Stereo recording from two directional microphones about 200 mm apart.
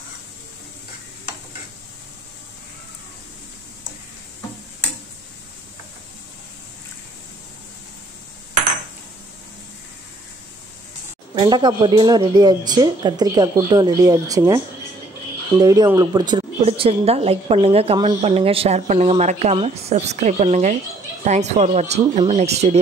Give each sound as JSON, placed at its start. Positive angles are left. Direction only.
{"t": 11.3, "sound": "a woman's voice", "side_deg": -20}